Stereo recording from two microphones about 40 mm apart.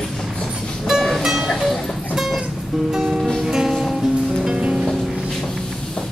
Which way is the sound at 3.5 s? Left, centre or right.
Centre.